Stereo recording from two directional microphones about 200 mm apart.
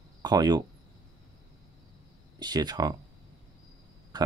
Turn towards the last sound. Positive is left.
turn(degrees=-20)  # may be behind; listen again after turning